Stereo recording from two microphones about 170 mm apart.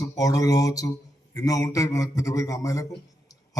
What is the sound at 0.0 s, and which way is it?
A man's voice, 20° left (ahead or behind).